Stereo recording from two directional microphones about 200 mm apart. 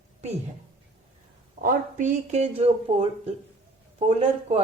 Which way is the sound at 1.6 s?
40° right (ahead or behind).